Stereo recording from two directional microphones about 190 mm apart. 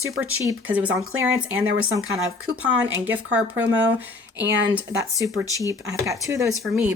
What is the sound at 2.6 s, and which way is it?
Speech, 10° right (ahead or behind).